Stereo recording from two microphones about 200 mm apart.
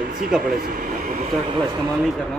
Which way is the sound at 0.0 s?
50° right (ahead or behind).